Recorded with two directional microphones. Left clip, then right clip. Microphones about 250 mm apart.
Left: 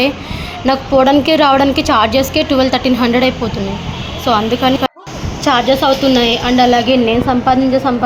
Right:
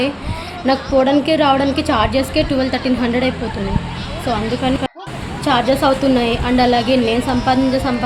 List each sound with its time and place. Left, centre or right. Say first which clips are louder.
0.6 s a woman's voice: left 4 dB; centre